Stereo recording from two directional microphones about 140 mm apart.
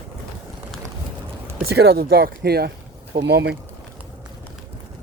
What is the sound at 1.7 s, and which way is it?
Speech, 90° right.